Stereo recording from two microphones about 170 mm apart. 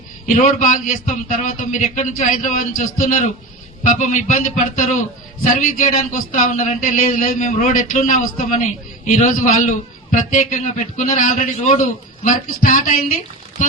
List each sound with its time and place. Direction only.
0.3 s a man's voice: 50° left (ahead or behind)